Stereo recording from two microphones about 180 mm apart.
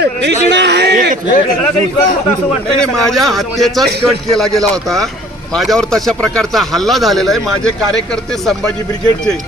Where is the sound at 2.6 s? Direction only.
Centre (ahead or behind).